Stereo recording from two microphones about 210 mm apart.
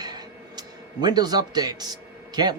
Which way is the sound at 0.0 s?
20° right (ahead or behind).